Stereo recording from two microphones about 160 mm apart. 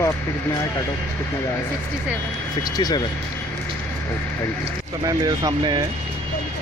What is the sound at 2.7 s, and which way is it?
Speech, 25° left (ahead or behind).